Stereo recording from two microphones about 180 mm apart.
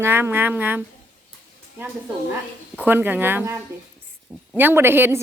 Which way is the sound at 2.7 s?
10° right (ahead or behind).